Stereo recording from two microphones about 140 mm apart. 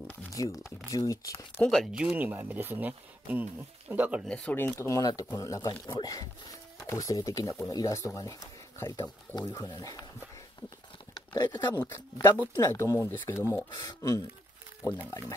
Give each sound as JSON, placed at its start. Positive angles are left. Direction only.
{"t": 0.3, "sound": "speech", "side_deg": 20}
{"t": 1.6, "sound": "speech", "side_deg": 5}
{"t": 2.0, "sound": "speech", "side_deg": -10}
{"t": 4.3, "sound": "speech", "side_deg": 10}
{"t": 4.7, "sound": "speech", "side_deg": 20}
{"t": 11.1, "sound": "speech", "side_deg": 30}
{"t": 11.8, "sound": "speech", "side_deg": 15}
{"t": 13.7, "sound": "speech", "side_deg": 25}